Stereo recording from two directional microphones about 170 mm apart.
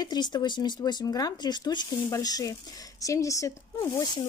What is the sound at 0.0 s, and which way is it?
Speech, 25° left (ahead or behind).